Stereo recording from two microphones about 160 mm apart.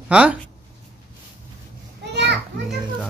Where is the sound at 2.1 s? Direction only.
90° right.